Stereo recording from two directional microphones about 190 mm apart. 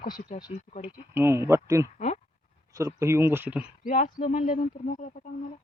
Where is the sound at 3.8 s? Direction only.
40° left (ahead or behind).